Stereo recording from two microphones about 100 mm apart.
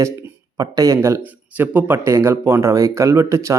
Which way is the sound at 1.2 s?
15° right (ahead or behind).